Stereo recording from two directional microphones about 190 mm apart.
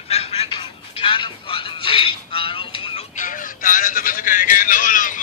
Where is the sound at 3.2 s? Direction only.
45° left (ahead or behind).